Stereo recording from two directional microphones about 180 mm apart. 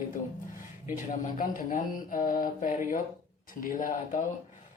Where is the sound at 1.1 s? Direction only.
45° left (ahead or behind).